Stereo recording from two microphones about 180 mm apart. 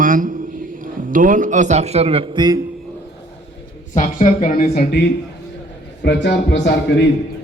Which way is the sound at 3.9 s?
45° left (ahead or behind).